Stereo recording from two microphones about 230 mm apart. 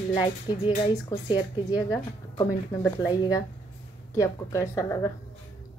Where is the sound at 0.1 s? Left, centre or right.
Centre.